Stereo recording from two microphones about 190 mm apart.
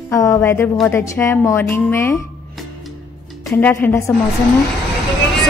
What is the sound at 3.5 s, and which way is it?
Speech, 10° left (ahead or behind).